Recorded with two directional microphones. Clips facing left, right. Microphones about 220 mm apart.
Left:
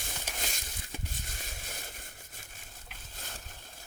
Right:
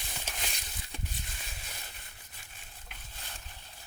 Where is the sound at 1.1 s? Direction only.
45° left (ahead or behind).